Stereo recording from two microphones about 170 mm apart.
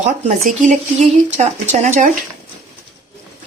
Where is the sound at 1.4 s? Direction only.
45° right (ahead or behind).